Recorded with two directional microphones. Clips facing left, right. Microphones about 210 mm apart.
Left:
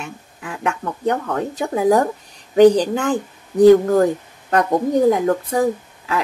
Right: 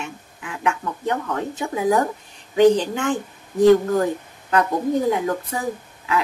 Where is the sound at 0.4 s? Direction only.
40° left (ahead or behind).